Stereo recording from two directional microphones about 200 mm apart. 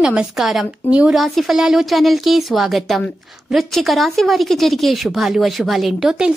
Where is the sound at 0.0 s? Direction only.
5° right (ahead or behind).